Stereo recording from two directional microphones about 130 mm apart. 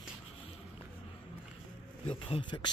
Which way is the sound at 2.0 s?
40° left (ahead or behind).